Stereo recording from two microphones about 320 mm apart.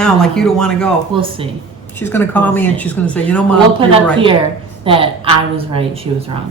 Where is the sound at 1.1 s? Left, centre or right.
Centre.